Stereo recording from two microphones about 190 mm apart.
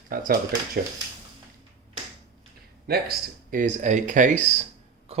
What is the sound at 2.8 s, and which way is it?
Speech, 55° right (ahead or behind).